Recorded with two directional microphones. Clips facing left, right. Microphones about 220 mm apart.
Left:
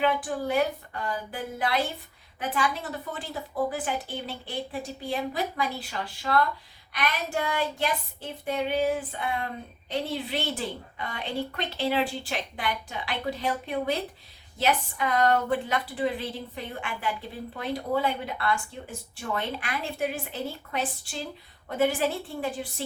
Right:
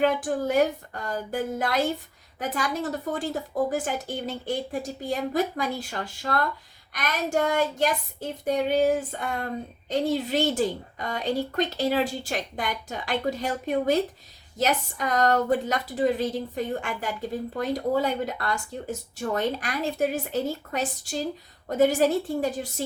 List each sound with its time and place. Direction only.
0.0 s a woman's voice: 45° right (ahead or behind)